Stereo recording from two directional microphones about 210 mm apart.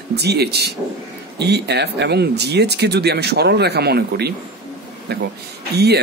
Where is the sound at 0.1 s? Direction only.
50° right (ahead or behind).